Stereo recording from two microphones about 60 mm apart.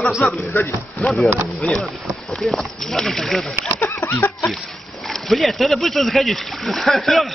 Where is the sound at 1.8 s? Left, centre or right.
Centre.